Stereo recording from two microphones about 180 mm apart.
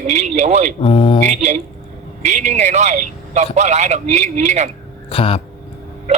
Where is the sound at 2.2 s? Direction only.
40° right (ahead or behind).